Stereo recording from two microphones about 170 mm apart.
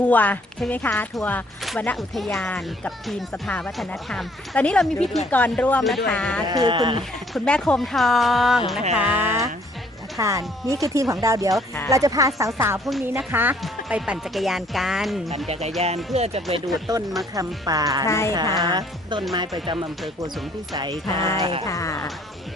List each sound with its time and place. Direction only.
0.1 s speech: 10° left (ahead or behind)
6.5 s speech: 25° right (ahead or behind)
7.3 s speech: 5° left (ahead or behind); by 12.8 s 15° right (ahead or behind)
12.8 s speech: centre (ahead or behind)
13.3 s speech: 10° right (ahead or behind)
15.8 s speech: 40° right (ahead or behind)
16.9 s speech: 20° right (ahead or behind)
18.0 s speech: 15° left (ahead or behind)
18.5 s speech: 25° right (ahead or behind)
21.6 s speech: 20° left (ahead or behind)